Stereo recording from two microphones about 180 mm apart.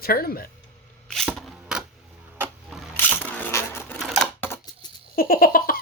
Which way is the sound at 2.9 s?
10° left (ahead or behind).